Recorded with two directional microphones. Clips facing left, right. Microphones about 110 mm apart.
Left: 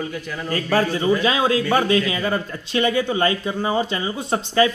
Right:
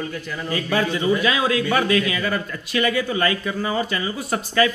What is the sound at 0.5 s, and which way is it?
A man's voice, 40° left (ahead or behind).